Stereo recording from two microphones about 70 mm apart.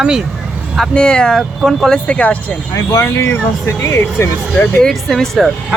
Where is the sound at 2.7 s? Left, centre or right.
Left.